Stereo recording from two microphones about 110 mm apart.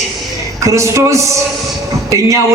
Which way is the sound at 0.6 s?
30° right (ahead or behind).